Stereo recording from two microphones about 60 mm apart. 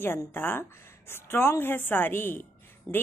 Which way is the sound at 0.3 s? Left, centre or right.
Left.